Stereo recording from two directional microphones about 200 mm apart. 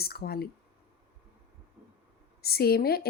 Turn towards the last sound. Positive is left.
turn(degrees=50)  # may be behind; listen again after turning